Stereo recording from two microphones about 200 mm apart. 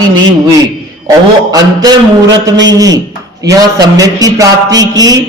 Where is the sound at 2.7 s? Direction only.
20° right (ahead or behind).